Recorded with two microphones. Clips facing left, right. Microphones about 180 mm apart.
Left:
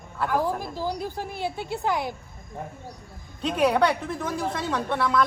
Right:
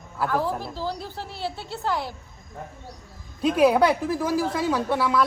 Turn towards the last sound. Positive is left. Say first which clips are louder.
# right 2 dB
turn(degrees=-5)  # may be behind; listen again after turning